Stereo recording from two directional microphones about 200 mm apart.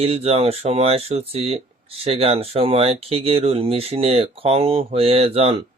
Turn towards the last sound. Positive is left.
turn(degrees=-30)  # may be behind; listen again after turning